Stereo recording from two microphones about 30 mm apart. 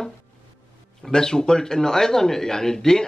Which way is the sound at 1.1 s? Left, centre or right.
Left.